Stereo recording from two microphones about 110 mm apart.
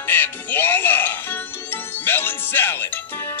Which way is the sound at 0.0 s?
20° left (ahead or behind).